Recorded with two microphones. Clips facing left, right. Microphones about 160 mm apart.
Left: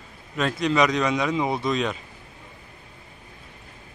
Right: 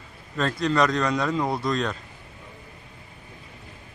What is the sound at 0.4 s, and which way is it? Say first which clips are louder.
Speech: left 1 dB; 15° left (ahead or behind).